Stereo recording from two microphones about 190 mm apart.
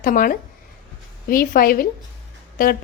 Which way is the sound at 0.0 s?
45° left (ahead or behind).